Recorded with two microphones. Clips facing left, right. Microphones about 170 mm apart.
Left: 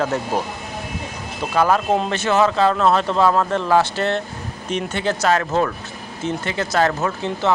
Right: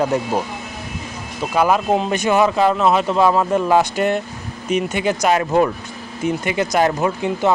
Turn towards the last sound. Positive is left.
turn(degrees=-15)  # may be behind; listen again after turning